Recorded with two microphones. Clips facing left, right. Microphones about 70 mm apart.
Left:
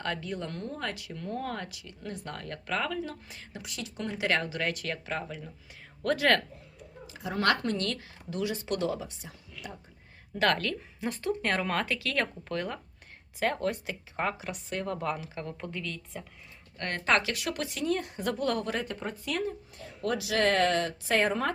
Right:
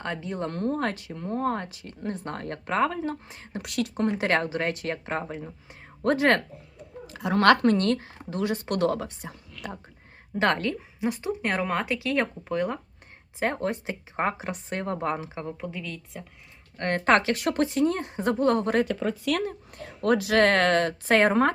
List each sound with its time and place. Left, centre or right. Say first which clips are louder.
0.0 s speech: right 3 dB; right
3.6 s speech: right 12 dB; right
3.9 s speech: right 4 dB; right
7.1 s speech: right 8 dB; right
10.3 s a woman's voice: right 3 dB; right
10.8 s speech: right 6 dB; centre
15.6 s speech: right 2 dB; centre
16.7 s speech: right 6 dB; right
18.9 s speech: right 8 dB; right